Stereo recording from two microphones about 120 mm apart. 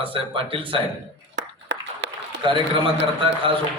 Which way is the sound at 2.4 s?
45° right (ahead or behind).